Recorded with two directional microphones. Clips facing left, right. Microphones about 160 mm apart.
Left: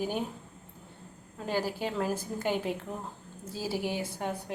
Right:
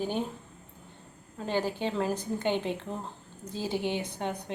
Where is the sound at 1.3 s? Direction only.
5° left (ahead or behind).